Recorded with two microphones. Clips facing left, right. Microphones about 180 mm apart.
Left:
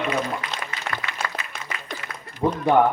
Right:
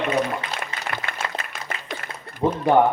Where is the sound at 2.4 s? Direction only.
10° right (ahead or behind).